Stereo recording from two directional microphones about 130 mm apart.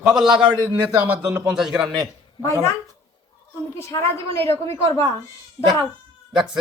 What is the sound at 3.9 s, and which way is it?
Speech, 20° left (ahead or behind).